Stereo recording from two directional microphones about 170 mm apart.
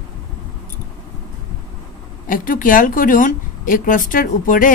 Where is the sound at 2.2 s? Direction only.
55° left (ahead or behind).